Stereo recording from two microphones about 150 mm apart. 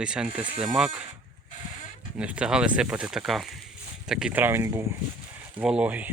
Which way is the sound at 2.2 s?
5° right (ahead or behind).